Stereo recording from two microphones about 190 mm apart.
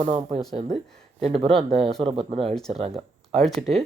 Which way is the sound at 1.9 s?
Centre (ahead or behind).